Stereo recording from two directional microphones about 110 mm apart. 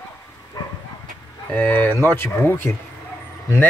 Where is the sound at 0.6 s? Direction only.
35° left (ahead or behind).